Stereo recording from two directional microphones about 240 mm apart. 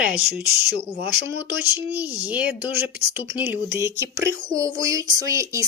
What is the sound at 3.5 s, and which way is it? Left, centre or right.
Speech, centre.